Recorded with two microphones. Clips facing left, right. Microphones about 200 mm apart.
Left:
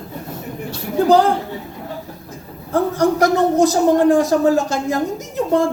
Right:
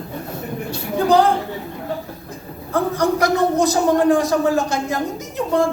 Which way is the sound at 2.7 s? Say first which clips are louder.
Left 2 dB; 45° left (ahead or behind).